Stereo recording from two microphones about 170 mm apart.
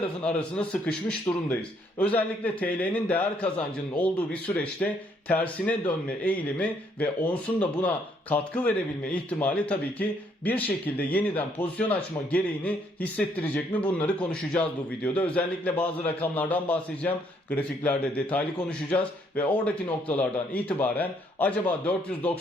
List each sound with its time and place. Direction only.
0.3 s a man's voice: 5° left (ahead or behind)